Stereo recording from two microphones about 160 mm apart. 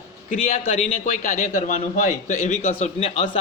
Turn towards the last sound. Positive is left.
turn(degrees=40)  # may be behind; listen again after turning